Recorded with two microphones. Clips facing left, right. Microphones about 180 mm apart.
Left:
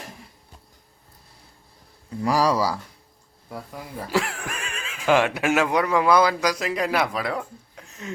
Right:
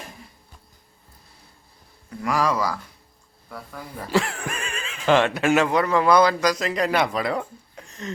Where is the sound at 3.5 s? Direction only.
15° left (ahead or behind).